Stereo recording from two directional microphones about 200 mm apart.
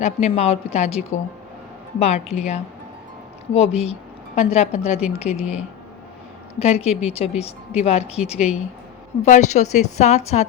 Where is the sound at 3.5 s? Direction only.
30° left (ahead or behind).